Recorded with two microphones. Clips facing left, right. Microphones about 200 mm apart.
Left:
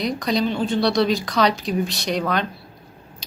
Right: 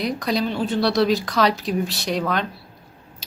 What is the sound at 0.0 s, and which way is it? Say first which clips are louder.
Speech: left 1 dB; 5° right (ahead or behind).